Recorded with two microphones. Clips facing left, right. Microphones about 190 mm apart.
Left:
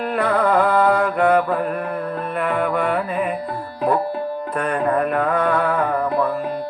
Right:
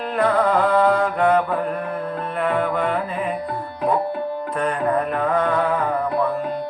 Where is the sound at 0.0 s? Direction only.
60° left (ahead or behind).